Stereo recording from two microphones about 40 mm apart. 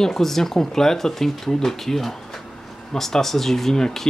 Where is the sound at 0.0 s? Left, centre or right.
Centre.